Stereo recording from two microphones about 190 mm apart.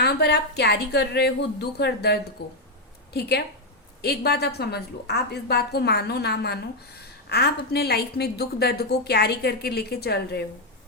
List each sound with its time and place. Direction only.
0.0 s a woman's voice: 60° left (ahead or behind)